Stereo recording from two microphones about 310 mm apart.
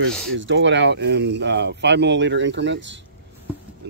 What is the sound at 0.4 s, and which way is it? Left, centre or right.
Speech, right.